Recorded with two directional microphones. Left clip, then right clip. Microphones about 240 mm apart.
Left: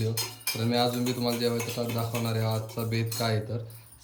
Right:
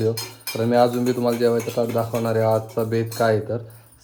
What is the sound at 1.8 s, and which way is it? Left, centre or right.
Speech, left.